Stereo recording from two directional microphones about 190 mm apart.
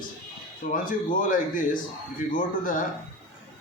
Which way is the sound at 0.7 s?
45° left (ahead or behind).